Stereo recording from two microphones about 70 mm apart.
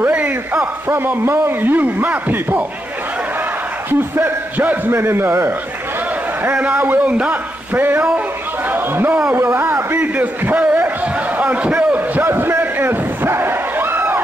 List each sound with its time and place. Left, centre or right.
0.1 s a sound: centre
0.8 s a man's voice: right
4.2 s a man's voice: right
6.4 s a man's voice: right
10.1 s a man's voice: right
12.2 s a sound: right